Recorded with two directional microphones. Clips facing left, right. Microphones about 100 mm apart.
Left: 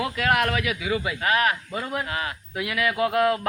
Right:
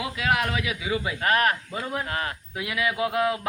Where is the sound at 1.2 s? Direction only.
40° right (ahead or behind).